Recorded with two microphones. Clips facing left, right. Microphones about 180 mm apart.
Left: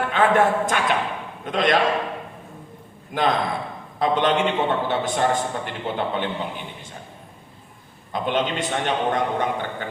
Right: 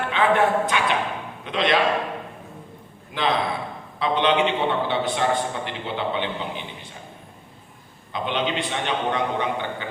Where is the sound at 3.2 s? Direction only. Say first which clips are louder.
Left 2 dB; 45° left (ahead or behind).